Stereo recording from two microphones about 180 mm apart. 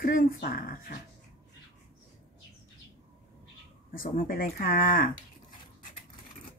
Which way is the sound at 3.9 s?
50° left (ahead or behind).